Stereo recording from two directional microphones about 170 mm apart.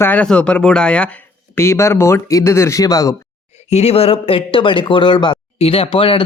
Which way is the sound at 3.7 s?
40° left (ahead or behind).